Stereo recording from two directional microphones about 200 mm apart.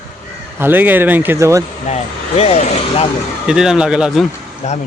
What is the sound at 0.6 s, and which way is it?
Speech, 10° right (ahead or behind).